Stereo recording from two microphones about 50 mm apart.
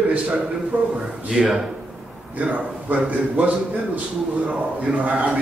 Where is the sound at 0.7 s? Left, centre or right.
Right.